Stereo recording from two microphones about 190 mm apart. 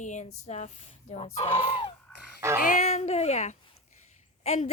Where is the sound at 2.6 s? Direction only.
35° left (ahead or behind).